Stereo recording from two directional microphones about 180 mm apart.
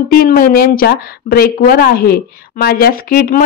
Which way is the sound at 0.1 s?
55° left (ahead or behind).